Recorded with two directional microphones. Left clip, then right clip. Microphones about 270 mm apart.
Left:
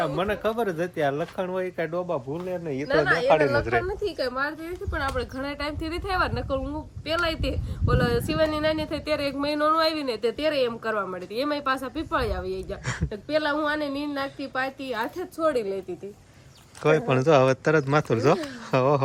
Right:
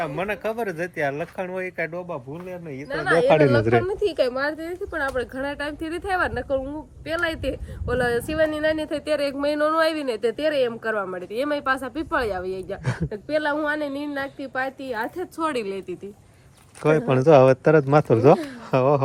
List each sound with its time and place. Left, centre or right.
0.3 s speech: centre
3.2 s speech: right
4.2 s speech: centre
12.8 s speech: centre
13.1 s speech: centre
16.8 s speech: centre